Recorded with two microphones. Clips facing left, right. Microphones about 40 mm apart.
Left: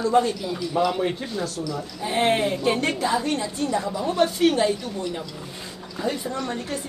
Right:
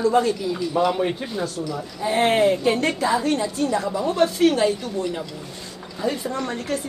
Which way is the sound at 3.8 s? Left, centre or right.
Centre.